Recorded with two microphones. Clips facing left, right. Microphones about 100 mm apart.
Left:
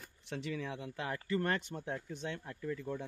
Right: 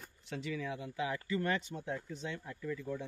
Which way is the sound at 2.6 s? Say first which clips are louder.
Even; 45° left (ahead or behind).